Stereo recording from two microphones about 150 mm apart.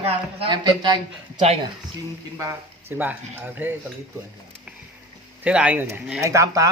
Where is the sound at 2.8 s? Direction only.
10° right (ahead or behind).